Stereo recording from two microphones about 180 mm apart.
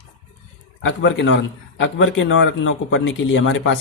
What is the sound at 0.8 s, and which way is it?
A man's voice, 90° left.